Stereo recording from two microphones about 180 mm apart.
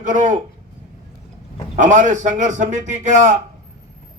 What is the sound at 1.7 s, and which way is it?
A man's voice, 45° right (ahead or behind).